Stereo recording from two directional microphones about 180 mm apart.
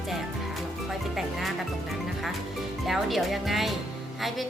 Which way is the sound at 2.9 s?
Centre (ahead or behind).